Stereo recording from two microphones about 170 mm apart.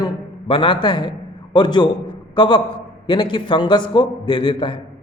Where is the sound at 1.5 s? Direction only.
25° left (ahead or behind).